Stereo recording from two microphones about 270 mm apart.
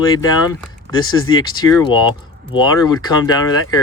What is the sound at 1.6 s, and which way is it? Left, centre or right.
Speech, centre.